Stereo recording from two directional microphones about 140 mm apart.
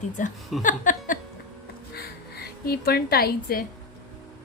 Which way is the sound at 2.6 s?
90° left.